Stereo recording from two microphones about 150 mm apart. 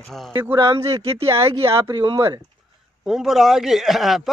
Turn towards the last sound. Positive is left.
turn(degrees=0)  # may be behind; listen again after turning